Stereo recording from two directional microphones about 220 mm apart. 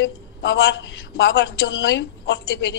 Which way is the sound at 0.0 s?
55° left (ahead or behind).